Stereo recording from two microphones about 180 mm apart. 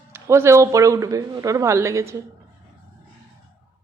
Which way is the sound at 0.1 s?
15° right (ahead or behind).